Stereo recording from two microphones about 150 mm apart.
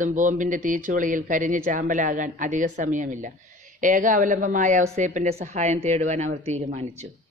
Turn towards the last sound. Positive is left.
turn(degrees=-45)  # may be behind; listen again after turning